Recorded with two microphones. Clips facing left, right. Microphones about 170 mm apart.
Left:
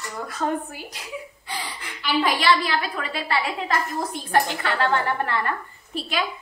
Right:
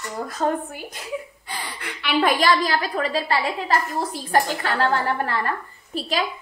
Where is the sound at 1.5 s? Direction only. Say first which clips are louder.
Right 1 dB; 60° right (ahead or behind); by 6.2 s 35° right (ahead or behind).